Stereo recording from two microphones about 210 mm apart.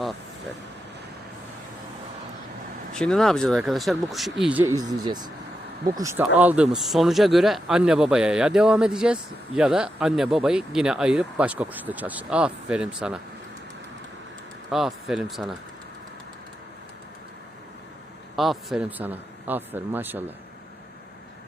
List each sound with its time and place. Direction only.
2.9 s speech: 5° left (ahead or behind)
4.8 s speech: 20° right (ahead or behind)
14.7 s speech: centre (ahead or behind)
18.3 s speech: centre (ahead or behind)